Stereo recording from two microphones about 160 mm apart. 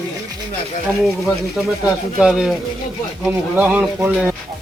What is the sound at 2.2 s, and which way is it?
Speech, 5° right (ahead or behind).